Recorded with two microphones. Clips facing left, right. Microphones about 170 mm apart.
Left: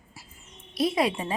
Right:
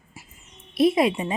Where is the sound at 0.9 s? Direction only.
20° right (ahead or behind).